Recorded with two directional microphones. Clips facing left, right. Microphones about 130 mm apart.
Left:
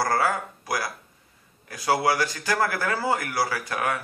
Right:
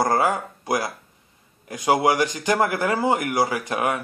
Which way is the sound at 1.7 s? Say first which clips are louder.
Right 4 dB; 20° right (ahead or behind).